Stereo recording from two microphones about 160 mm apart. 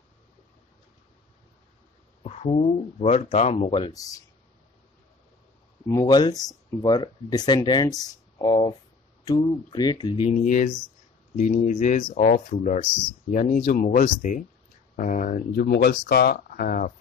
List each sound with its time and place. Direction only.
2.2 s speech: 45° left (ahead or behind)
3.8 s speech: 20° left (ahead or behind)
5.9 s speech: 20° left (ahead or behind)
10.2 s speech: 50° left (ahead or behind)